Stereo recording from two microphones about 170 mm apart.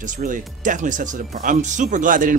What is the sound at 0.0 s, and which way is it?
Speech, 50° right (ahead or behind).